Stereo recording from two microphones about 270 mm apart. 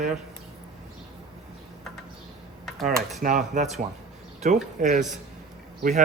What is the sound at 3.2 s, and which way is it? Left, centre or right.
A man's voice, right.